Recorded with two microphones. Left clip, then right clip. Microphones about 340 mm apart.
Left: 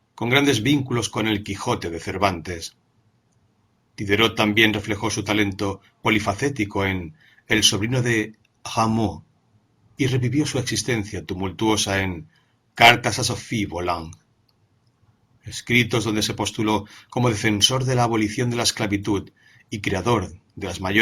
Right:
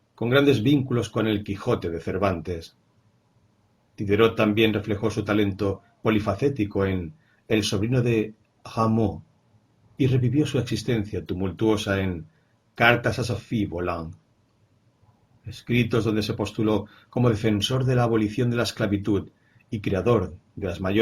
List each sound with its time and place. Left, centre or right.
0.2 s speech: centre
3.9 s speech: centre
10.0 s speech: centre
15.4 s speech: centre